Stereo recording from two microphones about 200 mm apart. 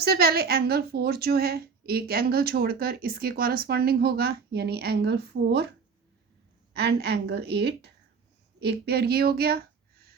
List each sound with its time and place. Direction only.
0.0 s a woman's voice: 50° right (ahead or behind)
6.7 s a woman's voice: 55° right (ahead or behind)